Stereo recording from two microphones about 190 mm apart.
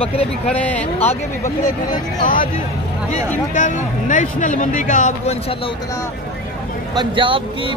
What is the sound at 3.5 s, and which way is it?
Speech, 40° left (ahead or behind).